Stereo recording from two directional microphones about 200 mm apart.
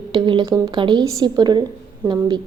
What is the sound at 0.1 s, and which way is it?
A woman's voice, 25° right (ahead or behind).